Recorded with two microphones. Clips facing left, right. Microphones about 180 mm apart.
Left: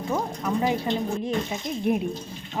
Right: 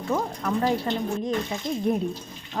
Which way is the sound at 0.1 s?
10° left (ahead or behind).